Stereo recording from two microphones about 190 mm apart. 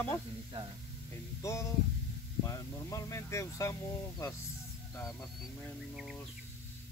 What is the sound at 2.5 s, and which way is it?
Speech, 15° left (ahead or behind).